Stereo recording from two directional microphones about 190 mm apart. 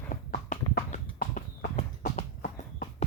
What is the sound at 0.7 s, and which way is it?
Clip-clop, 45° left (ahead or behind).